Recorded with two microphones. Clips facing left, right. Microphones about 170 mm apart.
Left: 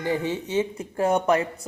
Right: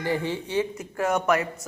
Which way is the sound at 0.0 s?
20° left (ahead or behind).